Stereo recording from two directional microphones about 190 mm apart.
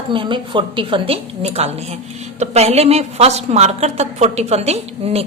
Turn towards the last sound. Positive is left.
turn(degrees=-35)  # may be behind; listen again after turning